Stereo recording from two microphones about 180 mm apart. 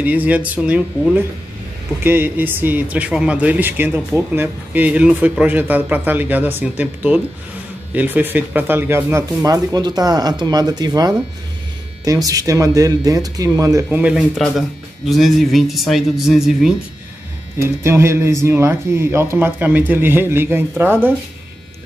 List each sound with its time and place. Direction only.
0.0 s speech: 10° right (ahead or behind)
17.6 s speech: 15° right (ahead or behind)